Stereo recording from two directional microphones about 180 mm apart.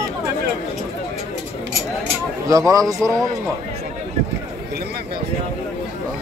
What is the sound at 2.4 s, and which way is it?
Speech, 20° right (ahead or behind).